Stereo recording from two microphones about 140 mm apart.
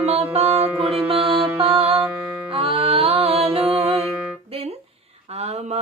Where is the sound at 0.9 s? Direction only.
40° right (ahead or behind).